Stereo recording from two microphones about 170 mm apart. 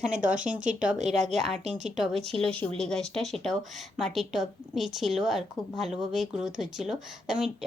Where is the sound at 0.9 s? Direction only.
45° right (ahead or behind).